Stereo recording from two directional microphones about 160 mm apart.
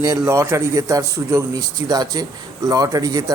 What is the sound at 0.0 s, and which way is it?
A man's voice, 20° right (ahead or behind).